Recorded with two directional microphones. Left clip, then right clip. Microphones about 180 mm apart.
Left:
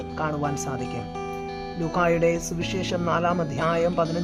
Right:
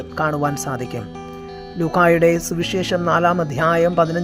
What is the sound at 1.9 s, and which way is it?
Speech, 30° right (ahead or behind).